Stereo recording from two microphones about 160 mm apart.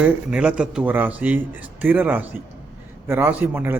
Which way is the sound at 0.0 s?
5° right (ahead or behind).